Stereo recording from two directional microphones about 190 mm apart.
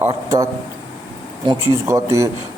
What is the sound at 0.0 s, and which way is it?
Speech, 15° right (ahead or behind).